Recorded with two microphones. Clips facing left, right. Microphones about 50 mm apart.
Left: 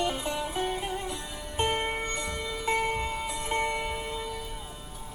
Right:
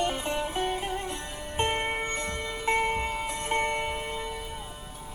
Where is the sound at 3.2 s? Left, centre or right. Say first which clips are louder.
Right 1 dB; right.